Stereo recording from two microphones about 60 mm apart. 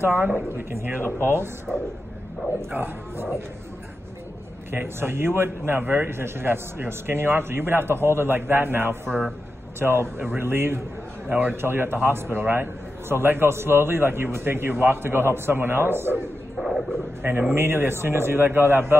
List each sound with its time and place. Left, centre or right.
0.0 s a man's voice: right
2.7 s a man's voice: right
4.6 s a man's voice: right
11.2 s a man's voice: right
11.5 s a man's voice: right
16.5 s a sound: centre
17.6 s a man's voice: right